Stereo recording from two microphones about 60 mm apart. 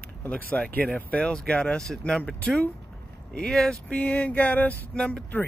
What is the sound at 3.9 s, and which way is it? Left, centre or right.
Speech, left.